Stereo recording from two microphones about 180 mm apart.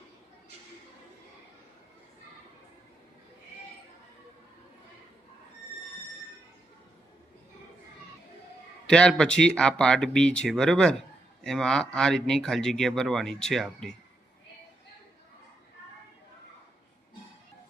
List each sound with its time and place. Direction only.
8.9 s speech: 5° left (ahead or behind)